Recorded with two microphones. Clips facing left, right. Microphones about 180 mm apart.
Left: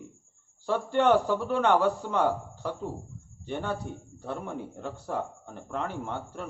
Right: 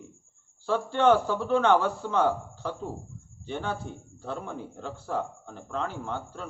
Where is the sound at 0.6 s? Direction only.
15° left (ahead or behind).